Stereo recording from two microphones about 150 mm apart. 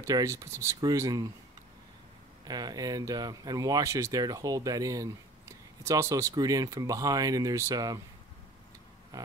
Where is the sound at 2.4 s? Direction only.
25° right (ahead or behind).